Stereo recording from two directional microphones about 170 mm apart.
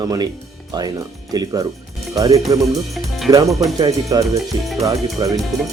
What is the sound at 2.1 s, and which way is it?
Speech, 20° right (ahead or behind).